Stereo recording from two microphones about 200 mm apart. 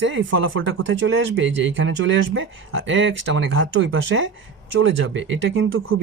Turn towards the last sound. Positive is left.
turn(degrees=-70)  # may be behind; listen again after turning